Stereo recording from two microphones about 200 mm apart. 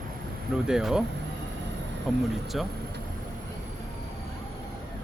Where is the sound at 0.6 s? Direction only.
5° right (ahead or behind).